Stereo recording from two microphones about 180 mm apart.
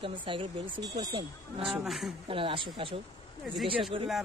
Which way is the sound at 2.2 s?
30° right (ahead or behind).